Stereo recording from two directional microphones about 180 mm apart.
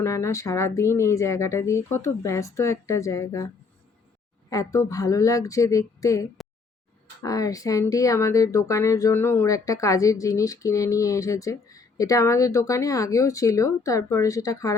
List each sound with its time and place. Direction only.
0.0 s a woman's voice: 15° left (ahead or behind)